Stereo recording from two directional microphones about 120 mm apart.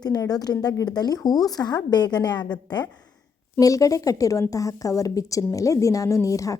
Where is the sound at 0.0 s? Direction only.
30° left (ahead or behind).